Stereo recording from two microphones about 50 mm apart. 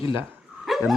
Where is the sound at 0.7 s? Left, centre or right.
Centre.